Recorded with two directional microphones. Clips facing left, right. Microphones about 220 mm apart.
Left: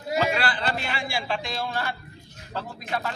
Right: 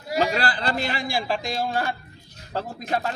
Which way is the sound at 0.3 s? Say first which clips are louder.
Right 2 dB; 40° right (ahead or behind).